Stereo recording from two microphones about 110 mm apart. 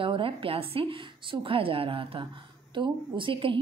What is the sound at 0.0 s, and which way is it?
A woman's voice, 55° right (ahead or behind).